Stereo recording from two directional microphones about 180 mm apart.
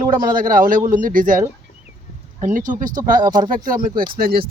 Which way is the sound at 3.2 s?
20° right (ahead or behind).